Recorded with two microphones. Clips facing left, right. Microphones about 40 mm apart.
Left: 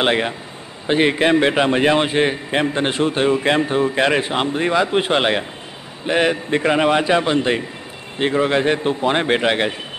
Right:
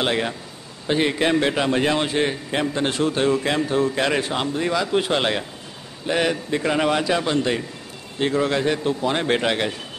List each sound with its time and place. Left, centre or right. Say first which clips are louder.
0.0 s a man's voice: left 4 dB; left